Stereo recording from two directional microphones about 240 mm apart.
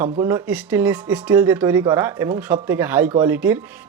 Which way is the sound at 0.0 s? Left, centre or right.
Centre.